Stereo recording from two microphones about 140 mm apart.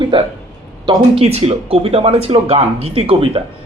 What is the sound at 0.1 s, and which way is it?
Speech, 40° right (ahead or behind).